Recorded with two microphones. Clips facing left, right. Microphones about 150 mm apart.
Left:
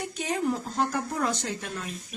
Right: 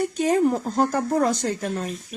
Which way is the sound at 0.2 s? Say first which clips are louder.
Right 8 dB; 45° right (ahead or behind).